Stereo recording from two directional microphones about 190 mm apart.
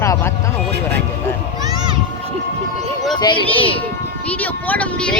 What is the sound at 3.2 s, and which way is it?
Speech, 25° left (ahead or behind).